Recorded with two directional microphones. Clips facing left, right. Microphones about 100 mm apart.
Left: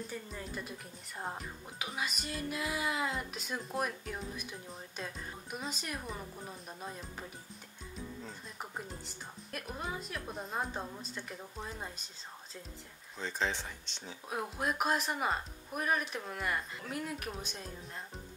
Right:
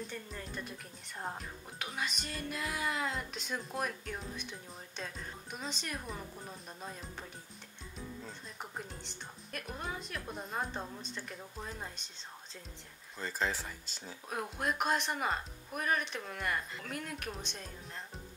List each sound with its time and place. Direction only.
0.0 s speech: 5° left (ahead or behind)
8.3 s speech: 5° left (ahead or behind)
13.2 s speech: 5° right (ahead or behind)